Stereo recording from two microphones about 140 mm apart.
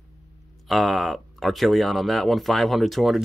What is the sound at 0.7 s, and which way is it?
Speech, centre (ahead or behind).